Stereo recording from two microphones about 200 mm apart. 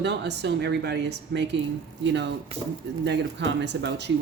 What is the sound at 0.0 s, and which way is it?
Speech, 60° right (ahead or behind).